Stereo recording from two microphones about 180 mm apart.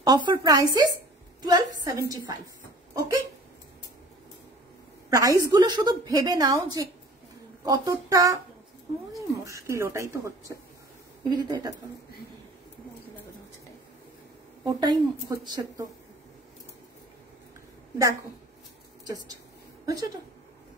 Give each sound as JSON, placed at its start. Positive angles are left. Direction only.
{"t": 0.0, "sound": "a woman's voice", "side_deg": -25}
{"t": 2.9, "sound": "hiccup", "side_deg": -15}
{"t": 5.1, "sound": "a woman's voice", "side_deg": -20}
{"t": 14.6, "sound": "a woman's voice", "side_deg": -25}
{"t": 19.0, "sound": "a woman's voice", "side_deg": -20}